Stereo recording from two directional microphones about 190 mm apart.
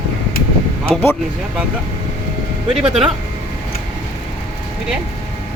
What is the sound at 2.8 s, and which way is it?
Speech, 30° right (ahead or behind).